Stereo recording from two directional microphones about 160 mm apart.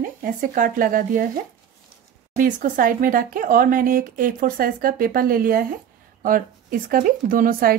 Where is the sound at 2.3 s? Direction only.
55° right (ahead or behind).